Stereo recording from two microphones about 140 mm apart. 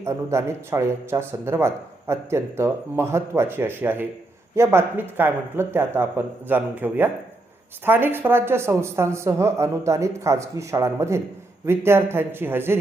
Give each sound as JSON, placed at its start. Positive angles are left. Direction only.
{"t": 0.0, "sound": "speech", "side_deg": -20}